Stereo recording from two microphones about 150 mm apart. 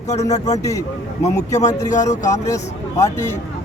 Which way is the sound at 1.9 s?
55° left (ahead or behind).